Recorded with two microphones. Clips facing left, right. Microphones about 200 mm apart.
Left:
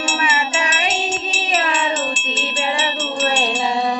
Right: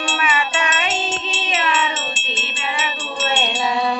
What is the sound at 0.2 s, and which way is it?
Music, 35° left (ahead or behind).